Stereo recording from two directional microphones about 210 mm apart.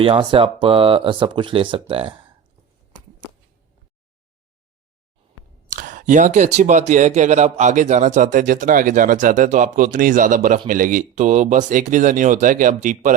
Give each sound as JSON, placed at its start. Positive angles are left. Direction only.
{"t": 0.0, "sound": "speech", "side_deg": -25}
{"t": 5.6, "sound": "speech", "side_deg": -40}